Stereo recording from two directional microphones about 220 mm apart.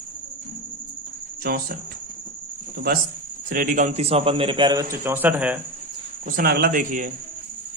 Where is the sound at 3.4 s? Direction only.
40° right (ahead or behind); by 5.6 s 5° right (ahead or behind).